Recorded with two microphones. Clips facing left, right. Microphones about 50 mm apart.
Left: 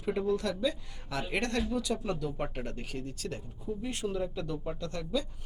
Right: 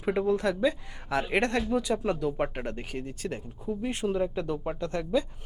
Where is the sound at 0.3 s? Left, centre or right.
Right.